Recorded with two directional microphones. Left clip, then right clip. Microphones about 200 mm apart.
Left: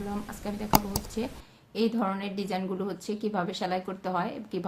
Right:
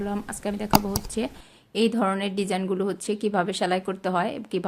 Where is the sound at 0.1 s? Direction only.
35° right (ahead or behind).